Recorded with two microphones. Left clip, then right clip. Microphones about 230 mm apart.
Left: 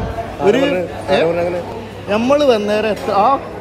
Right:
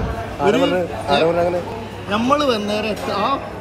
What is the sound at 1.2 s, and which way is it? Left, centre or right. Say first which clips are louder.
Speech: left 1 dB; centre.